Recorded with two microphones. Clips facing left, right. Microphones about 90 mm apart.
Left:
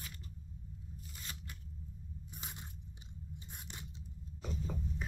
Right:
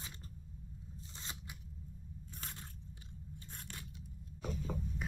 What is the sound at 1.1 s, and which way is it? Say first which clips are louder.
Scissors: right 1 dB; 20° right (ahead or behind).